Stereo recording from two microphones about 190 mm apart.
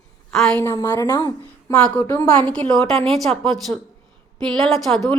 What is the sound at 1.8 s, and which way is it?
A woman's voice, 5° left (ahead or behind).